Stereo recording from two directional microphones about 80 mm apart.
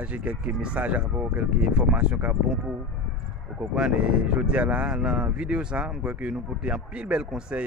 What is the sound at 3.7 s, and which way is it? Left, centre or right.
Speech, centre.